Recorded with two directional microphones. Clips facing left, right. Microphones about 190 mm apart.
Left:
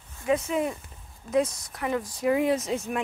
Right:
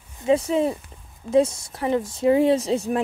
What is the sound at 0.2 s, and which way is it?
Speech, 30° right (ahead or behind).